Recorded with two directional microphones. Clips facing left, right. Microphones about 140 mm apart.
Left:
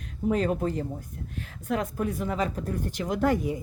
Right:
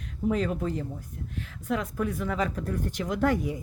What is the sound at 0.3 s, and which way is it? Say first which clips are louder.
Speech: left 2 dB; 45° left (ahead or behind).